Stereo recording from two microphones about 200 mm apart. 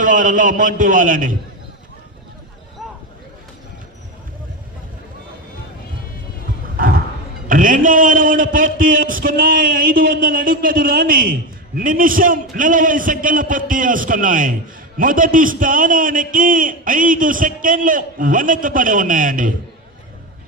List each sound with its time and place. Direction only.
0.0 s a man's voice: 40° right (ahead or behind)
7.4 s a man's voice: 40° right (ahead or behind)